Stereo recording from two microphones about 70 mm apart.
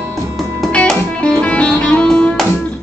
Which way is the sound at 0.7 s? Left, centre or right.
Centre.